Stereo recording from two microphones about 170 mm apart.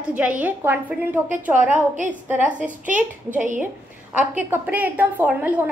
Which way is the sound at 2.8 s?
50° right (ahead or behind).